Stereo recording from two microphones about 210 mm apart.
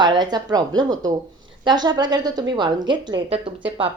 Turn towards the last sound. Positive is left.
turn(degrees=-25)  # may be behind; listen again after turning